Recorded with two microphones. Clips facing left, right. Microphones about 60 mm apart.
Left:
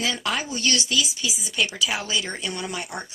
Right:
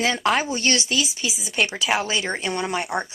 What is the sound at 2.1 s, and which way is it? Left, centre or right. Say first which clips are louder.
Speech: right 3 dB; right.